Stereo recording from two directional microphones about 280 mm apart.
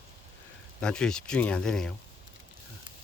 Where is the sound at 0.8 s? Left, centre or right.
Centre.